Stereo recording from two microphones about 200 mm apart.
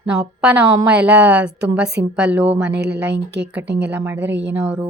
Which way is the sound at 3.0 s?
10° right (ahead or behind).